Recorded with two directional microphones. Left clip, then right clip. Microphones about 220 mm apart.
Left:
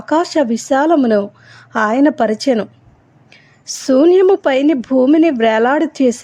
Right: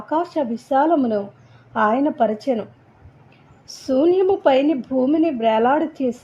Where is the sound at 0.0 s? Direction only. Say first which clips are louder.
Left 7 dB; 25° left (ahead or behind).